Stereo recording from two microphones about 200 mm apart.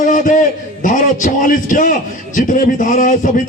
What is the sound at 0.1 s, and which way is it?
A man's voice, 40° left (ahead or behind).